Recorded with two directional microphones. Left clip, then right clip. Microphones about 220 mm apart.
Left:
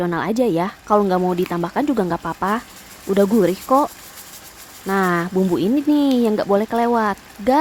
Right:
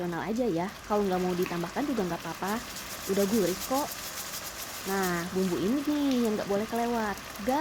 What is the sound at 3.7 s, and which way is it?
Speech, 40° left (ahead or behind).